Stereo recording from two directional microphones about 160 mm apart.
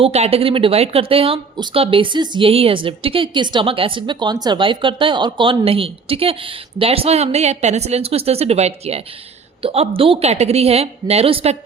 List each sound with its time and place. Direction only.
0.0 s a woman's voice: 40° right (ahead or behind)